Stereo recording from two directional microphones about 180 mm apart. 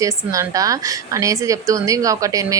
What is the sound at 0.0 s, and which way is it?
A woman's voice, 20° right (ahead or behind).